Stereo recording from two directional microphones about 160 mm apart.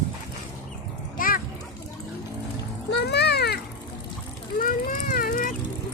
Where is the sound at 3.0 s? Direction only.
90° left.